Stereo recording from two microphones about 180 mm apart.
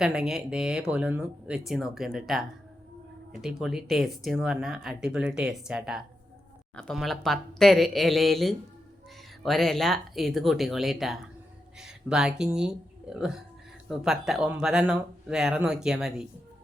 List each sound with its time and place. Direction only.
0.0 s speech: 5° right (ahead or behind)